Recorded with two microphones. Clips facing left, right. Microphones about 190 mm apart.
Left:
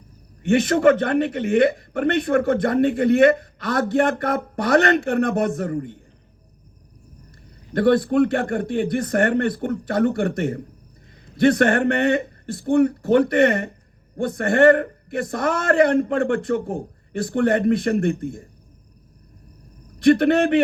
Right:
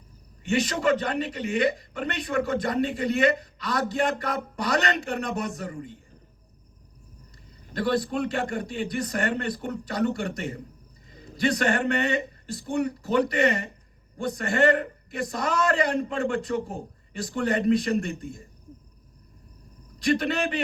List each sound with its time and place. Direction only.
0.4 s a man's voice: 55° left (ahead or behind)
7.7 s a man's voice: 60° left (ahead or behind)
20.0 s a man's voice: 55° left (ahead or behind)